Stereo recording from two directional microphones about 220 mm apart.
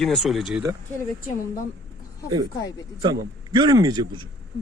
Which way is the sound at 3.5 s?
20° right (ahead or behind).